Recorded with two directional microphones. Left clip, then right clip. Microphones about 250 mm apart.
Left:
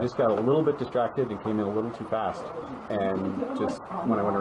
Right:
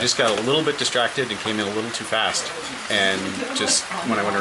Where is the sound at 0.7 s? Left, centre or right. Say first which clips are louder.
Right 5 dB; centre.